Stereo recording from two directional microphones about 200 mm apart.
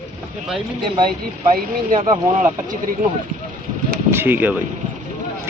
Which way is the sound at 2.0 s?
20° right (ahead or behind).